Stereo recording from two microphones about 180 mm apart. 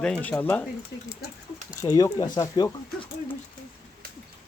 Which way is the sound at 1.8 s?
20° left (ahead or behind).